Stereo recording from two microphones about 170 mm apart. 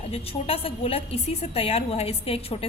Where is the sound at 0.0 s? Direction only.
35° left (ahead or behind).